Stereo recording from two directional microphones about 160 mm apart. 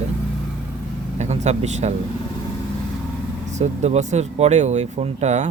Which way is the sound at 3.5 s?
45° right (ahead or behind).